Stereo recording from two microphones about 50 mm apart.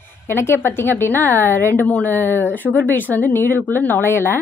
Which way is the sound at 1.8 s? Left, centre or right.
Left.